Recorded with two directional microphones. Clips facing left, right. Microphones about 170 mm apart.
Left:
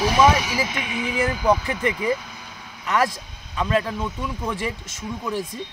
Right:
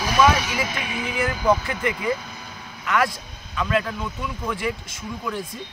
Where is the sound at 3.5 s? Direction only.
30° left (ahead or behind).